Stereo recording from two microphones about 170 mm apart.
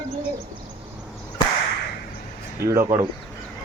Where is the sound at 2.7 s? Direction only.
15° right (ahead or behind).